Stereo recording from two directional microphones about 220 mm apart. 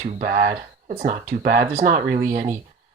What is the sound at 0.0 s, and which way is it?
Speech, 35° right (ahead or behind).